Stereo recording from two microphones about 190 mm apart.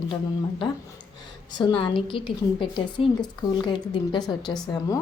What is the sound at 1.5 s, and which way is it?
A woman's voice, 25° left (ahead or behind).